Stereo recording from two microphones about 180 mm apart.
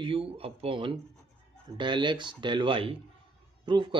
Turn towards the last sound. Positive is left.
turn(degrees=-25)  # may be behind; listen again after turning